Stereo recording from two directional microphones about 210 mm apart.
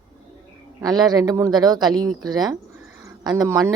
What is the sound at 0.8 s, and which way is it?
Speech, 20° right (ahead or behind).